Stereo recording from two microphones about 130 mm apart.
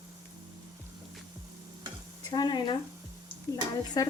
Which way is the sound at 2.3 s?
30° left (ahead or behind).